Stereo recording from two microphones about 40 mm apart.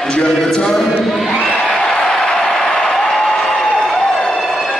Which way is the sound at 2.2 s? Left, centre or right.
Centre.